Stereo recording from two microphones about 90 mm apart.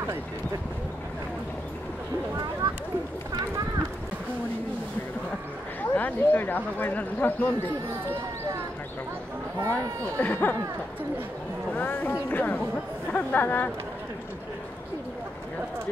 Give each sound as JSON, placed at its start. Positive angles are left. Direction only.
{"t": 5.9, "sound": "speech", "side_deg": 20}
{"t": 9.7, "sound": "speech", "side_deg": 20}
{"t": 11.7, "sound": "speech", "side_deg": 20}